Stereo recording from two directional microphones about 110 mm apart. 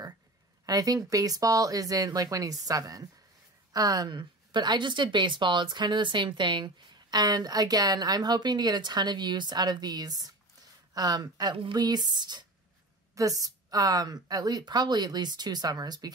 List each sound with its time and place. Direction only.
0.7 s a woman's voice: 35° right (ahead or behind)
11.5 s speech: 50° right (ahead or behind)
11.8 s a woman's voice: 40° right (ahead or behind)